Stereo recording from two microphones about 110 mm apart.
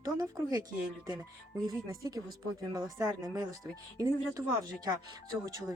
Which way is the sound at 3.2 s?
30° right (ahead or behind).